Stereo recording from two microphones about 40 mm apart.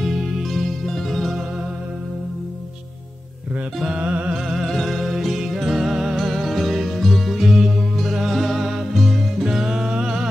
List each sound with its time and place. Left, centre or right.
0.0 s music: centre
3.9 s music: right
4.3 s music: centre
6.1 s music: centre
9.7 s music: centre